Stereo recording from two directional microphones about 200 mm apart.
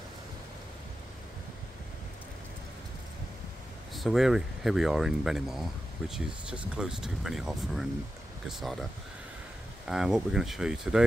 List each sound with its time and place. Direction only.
3.9 s speech: centre (ahead or behind)
9.8 s speech: 5° right (ahead or behind)